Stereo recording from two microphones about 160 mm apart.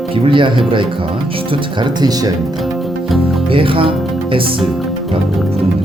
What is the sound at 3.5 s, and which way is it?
Speech, 35° right (ahead or behind).